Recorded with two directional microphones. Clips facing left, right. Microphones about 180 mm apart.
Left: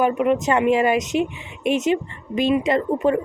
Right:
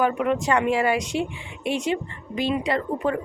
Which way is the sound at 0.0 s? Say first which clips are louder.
Left 3 dB; 20° left (ahead or behind).